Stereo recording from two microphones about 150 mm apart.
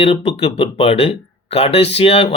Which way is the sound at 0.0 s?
40° left (ahead or behind).